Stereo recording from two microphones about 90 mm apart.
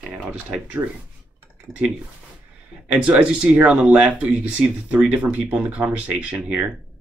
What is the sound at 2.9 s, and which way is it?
Speech, 15° right (ahead or behind).